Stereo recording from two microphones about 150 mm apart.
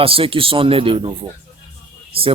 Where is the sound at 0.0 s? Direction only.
35° right (ahead or behind).